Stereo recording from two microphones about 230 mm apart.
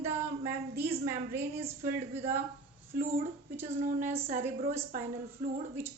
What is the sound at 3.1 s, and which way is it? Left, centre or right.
A woman's voice, right.